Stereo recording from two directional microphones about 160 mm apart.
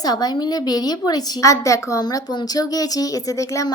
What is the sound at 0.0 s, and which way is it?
A woman's voice, 25° left (ahead or behind).